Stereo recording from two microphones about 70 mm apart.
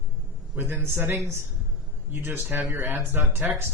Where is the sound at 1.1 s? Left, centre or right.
Right.